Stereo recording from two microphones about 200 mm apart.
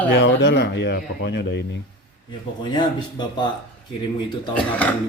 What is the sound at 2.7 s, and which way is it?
Speech, 20° left (ahead or behind).